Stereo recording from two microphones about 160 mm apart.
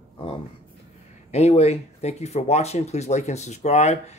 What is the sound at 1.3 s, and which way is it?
Speech, 40° left (ahead or behind).